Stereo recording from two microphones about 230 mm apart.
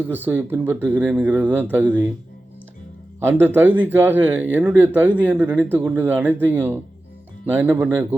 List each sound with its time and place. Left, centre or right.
0.0 s speech: centre
3.2 s speech: centre